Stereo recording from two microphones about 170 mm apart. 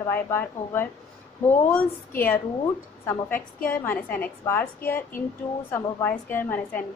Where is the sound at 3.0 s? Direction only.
15° left (ahead or behind).